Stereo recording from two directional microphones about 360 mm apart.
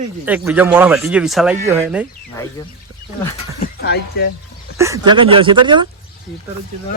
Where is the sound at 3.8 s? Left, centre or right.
Left.